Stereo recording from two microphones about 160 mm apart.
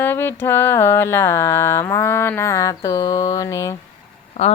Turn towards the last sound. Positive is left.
turn(degrees=45)  # may be behind; listen again after turning